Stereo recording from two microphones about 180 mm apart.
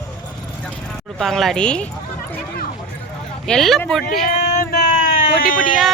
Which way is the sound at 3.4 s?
5° left (ahead or behind).